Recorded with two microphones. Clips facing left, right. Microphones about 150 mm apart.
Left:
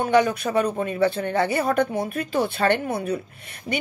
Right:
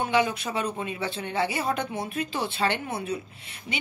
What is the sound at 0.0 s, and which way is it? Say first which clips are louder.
Speech: left 5 dB; 50° left (ahead or behind).